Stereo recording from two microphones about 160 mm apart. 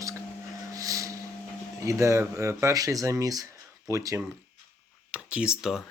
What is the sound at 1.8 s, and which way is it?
Speech, 20° right (ahead or behind).